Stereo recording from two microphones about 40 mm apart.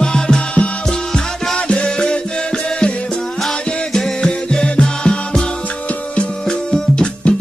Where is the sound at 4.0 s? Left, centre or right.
Centre.